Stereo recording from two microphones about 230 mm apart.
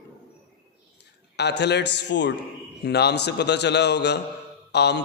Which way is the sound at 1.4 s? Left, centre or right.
Left.